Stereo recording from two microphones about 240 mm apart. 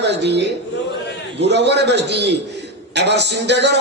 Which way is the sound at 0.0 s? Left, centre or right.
Right.